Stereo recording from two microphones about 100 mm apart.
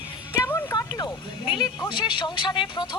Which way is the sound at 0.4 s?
35° left (ahead or behind).